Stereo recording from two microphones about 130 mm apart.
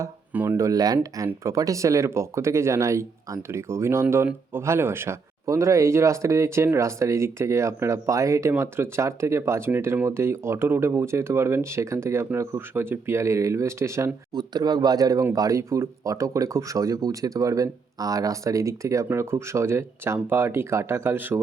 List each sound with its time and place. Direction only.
0.0 s speech: 20° right (ahead or behind)
14.3 s speech: 30° right (ahead or behind); by 21.4 s 15° right (ahead or behind)